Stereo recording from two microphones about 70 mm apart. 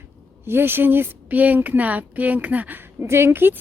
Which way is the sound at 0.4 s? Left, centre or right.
Right.